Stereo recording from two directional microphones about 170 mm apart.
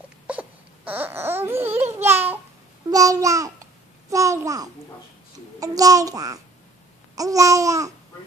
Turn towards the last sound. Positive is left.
turn(degrees=-20)  # may be behind; listen again after turning